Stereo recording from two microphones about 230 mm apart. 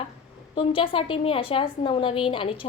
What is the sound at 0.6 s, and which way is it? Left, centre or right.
A woman's voice, left.